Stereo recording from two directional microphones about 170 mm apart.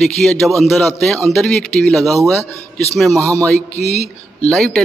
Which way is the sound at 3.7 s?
40° left (ahead or behind).